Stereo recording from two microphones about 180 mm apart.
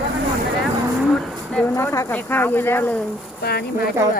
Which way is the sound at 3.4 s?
60° left (ahead or behind).